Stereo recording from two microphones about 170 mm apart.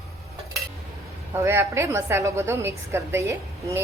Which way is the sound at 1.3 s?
15° right (ahead or behind).